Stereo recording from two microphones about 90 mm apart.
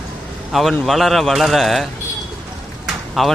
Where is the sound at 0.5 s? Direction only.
Centre (ahead or behind).